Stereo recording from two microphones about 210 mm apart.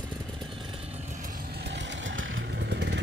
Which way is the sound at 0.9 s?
40° right (ahead or behind).